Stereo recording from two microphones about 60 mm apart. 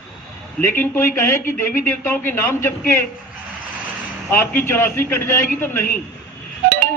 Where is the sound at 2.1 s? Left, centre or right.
Left.